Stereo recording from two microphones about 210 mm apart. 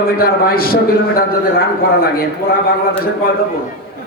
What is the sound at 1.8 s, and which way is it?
Speech, 45° left (ahead or behind).